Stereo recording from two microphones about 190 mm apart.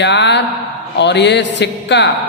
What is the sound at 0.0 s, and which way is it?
A man's voice, 65° left (ahead or behind).